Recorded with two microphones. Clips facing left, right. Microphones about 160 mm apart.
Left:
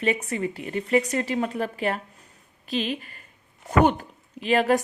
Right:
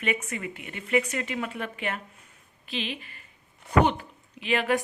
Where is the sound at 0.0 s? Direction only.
35° left (ahead or behind).